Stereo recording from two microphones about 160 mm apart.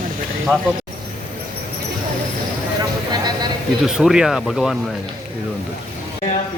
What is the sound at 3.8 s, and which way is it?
Speech, centre (ahead or behind).